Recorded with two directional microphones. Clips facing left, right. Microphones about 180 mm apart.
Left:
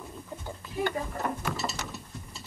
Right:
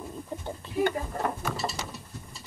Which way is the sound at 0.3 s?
25° right (ahead or behind).